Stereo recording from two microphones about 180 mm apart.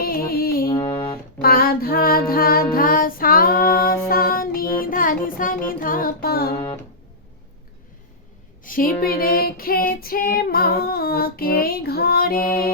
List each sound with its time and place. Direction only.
0.0 s music: 55° left (ahead or behind)
0.9 s music: 25° left (ahead or behind)
1.4 s music: 55° left (ahead or behind)
8.6 s female singing: 50° left (ahead or behind)